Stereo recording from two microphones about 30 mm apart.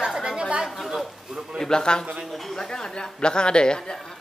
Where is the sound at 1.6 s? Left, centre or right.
Left.